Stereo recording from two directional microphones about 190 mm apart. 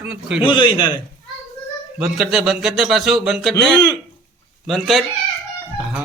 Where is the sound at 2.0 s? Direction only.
Centre (ahead or behind).